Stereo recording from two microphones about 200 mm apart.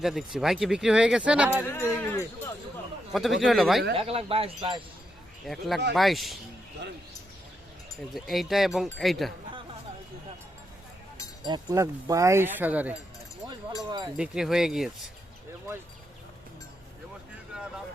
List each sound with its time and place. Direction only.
0.0 s speech: centre (ahead or behind)
1.6 s speech: 10° left (ahead or behind)
3.1 s a man's voice: centre (ahead or behind)
3.9 s speech: 30° right (ahead or behind)
5.5 s speech: centre (ahead or behind)
8.1 s speech: centre (ahead or behind)
11.4 s speech: 20° right (ahead or behind)
14.2 s speech: centre (ahead or behind)
17.5 s vehicle: 5° right (ahead or behind)